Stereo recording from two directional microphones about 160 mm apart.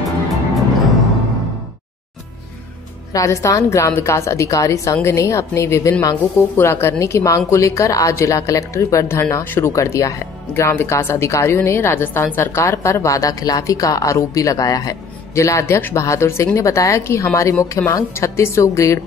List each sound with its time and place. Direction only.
3.1 s a woman's voice: 20° left (ahead or behind)